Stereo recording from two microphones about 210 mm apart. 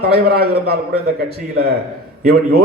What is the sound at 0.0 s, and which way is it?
Speech, 50° right (ahead or behind).